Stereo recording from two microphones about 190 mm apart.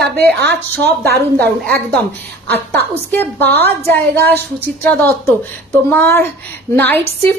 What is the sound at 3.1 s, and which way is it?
A woman's voice, 10° left (ahead or behind).